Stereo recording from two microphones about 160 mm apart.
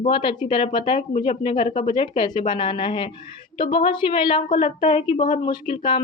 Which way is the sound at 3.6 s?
30° left (ahead or behind).